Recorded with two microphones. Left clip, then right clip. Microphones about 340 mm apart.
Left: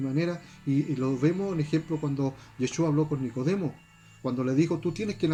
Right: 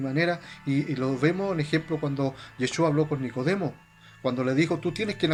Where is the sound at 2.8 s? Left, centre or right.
Right.